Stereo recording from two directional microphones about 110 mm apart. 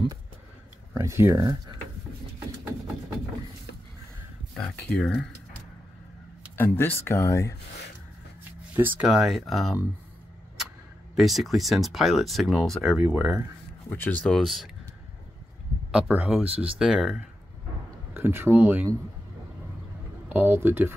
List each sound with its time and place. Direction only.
0.9 s speech: 25° right (ahead or behind)
4.6 s speech: 10° left (ahead or behind)
6.5 s speech: 20° left (ahead or behind)
8.7 s speech: 20° right (ahead or behind)
9.0 s speech: 5° right (ahead or behind)
11.1 s speech: centre (ahead or behind)
13.0 s speech: 10° right (ahead or behind)
13.8 s speech: 20° left (ahead or behind); by 14.7 s centre (ahead or behind)
15.9 s speech: 10° right (ahead or behind)
18.1 s speech: 20° right (ahead or behind)
20.2 s speech: 15° right (ahead or behind)